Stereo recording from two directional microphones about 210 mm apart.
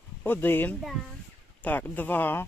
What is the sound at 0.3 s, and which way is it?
Speech, 10° left (ahead or behind).